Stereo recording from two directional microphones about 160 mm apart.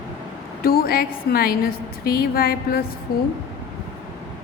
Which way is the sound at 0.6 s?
70° left (ahead or behind).